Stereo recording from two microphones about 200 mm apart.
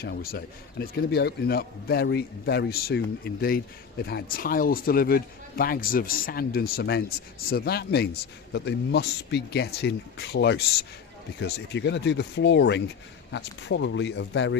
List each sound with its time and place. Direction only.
0.0 s speech: 50° left (ahead or behind); by 14.6 s 65° left (ahead or behind)